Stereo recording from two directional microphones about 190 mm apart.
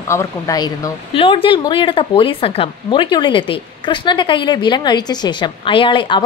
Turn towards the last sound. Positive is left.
turn(degrees=25)  # may be behind; listen again after turning